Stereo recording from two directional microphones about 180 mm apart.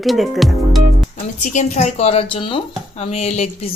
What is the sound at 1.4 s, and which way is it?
Speech, 40° left (ahead or behind).